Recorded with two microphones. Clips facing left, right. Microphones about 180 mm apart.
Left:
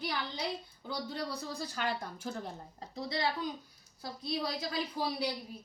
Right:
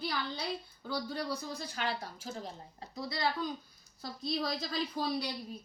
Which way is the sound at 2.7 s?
25° left (ahead or behind).